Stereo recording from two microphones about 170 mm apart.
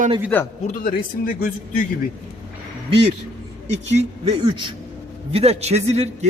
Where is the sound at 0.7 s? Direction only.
55° left (ahead or behind).